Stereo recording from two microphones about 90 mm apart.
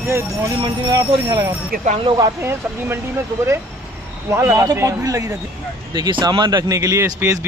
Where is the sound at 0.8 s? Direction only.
45° right (ahead or behind).